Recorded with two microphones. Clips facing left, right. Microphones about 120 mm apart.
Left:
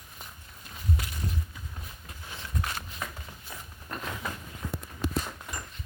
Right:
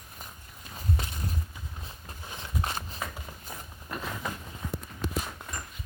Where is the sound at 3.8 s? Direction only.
5° right (ahead or behind).